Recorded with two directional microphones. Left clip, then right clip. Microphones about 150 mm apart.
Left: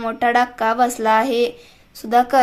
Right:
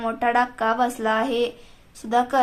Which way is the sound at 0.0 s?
25° left (ahead or behind).